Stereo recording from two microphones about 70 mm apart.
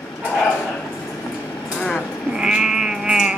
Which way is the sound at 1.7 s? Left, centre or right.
Centre.